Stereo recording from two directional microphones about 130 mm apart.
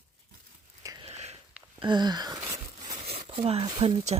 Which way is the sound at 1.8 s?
35° right (ahead or behind).